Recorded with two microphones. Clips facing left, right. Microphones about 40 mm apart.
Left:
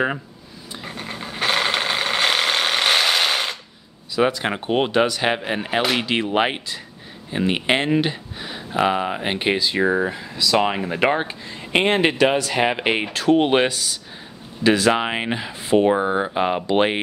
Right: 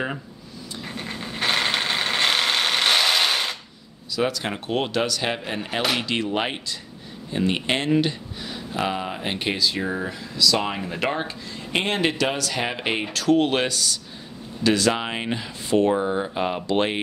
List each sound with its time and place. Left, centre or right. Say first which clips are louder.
0.8 s a sound: left 2 dB; centre
4.1 s speech: left 5 dB; left
5.8 s speech: left 3 dB; centre
6.0 s speech: left 4 dB; left
9.8 s speech: left 8 dB; left
10.0 s speech: even; left
15.9 s speech: left 3 dB; left